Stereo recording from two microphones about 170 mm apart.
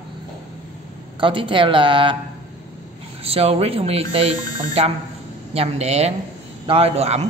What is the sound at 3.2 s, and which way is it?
A man's voice, 35° right (ahead or behind).